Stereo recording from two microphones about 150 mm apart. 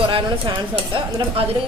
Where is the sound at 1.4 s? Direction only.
40° right (ahead or behind).